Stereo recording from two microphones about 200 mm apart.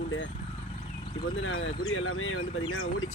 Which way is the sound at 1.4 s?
75° left (ahead or behind).